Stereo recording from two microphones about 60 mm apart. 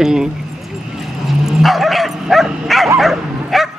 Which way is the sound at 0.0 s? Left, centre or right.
Centre.